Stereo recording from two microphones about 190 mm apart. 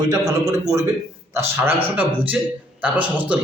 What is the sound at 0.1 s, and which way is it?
A man's voice, 15° right (ahead or behind).